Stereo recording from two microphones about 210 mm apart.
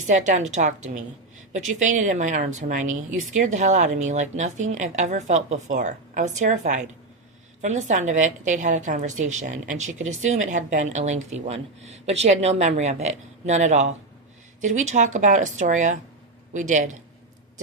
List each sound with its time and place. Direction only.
0.1 s speech: 35° right (ahead or behind)